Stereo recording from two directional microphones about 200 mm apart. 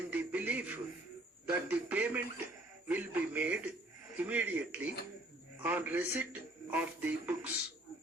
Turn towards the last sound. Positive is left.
turn(degrees=-5)  # may be behind; listen again after turning